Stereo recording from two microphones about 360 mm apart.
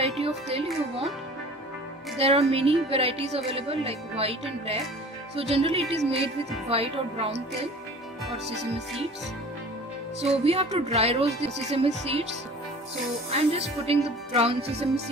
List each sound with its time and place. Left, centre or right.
0.0 s speech: centre
2.1 s a woman's voice: centre
10.2 s a woman's voice: centre
13.3 s a woman's voice: centre